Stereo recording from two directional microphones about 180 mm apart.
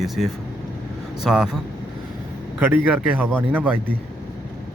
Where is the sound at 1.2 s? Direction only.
5° right (ahead or behind).